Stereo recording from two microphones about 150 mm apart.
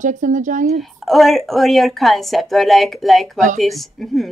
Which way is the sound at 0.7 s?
Centre (ahead or behind).